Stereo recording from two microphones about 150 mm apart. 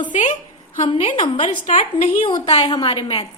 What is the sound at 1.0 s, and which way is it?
Speech, 35° left (ahead or behind).